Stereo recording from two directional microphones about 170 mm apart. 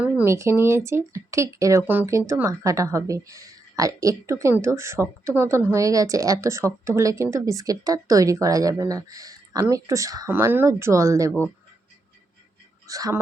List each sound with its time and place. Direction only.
0.0 s speech: 10° right (ahead or behind)
12.9 s speech: 20° right (ahead or behind)